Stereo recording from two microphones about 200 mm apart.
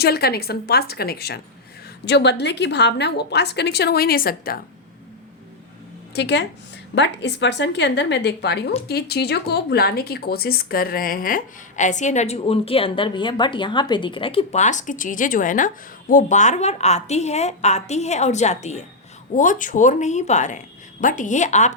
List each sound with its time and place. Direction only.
0.0 s a woman's voice: 50° left (ahead or behind)
6.1 s a woman's voice: 60° left (ahead or behind); by 21.8 s 35° left (ahead or behind)